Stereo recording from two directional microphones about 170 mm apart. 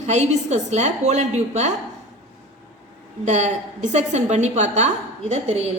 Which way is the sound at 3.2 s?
45° right (ahead or behind).